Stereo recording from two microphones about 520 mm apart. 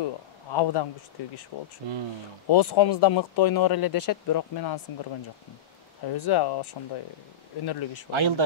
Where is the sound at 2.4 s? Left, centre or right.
Left.